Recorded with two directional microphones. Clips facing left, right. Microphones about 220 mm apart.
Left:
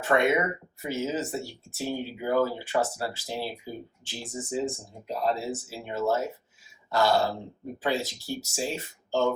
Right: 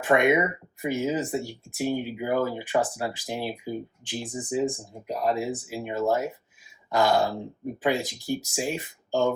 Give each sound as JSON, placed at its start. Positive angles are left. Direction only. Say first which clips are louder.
{"t": 0.0, "sound": "speech", "louder": "right 3 dB", "side_deg": -15}